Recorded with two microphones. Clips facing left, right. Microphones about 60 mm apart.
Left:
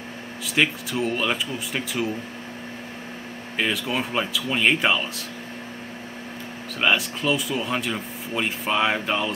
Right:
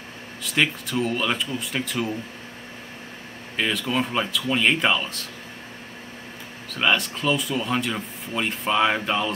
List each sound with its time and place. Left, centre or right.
0.5 s speech: centre
3.5 s speech: centre
6.8 s speech: centre